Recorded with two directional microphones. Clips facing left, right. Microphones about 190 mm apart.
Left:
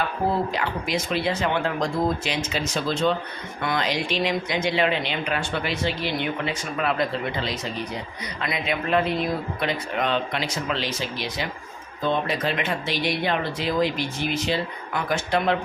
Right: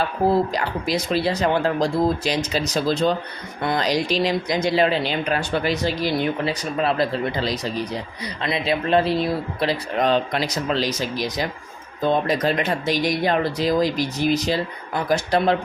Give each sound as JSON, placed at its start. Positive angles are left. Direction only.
{"t": 0.3, "sound": "speech", "side_deg": -40}